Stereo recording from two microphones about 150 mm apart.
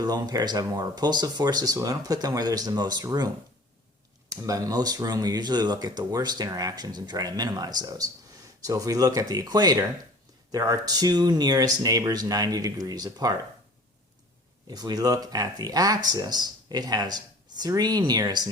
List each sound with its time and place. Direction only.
0.0 s speech: 25° right (ahead or behind)
14.7 s speech: 25° right (ahead or behind)